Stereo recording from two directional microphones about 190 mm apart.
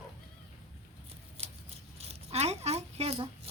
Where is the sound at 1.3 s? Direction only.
35° right (ahead or behind).